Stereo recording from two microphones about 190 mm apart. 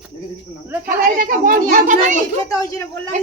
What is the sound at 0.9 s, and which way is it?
A child's voice, 45° right (ahead or behind).